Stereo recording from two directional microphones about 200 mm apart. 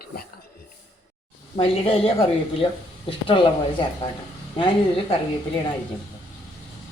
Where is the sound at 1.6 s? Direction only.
30° left (ahead or behind).